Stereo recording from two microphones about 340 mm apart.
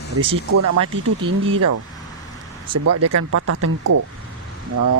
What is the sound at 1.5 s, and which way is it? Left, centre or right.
Speech, right.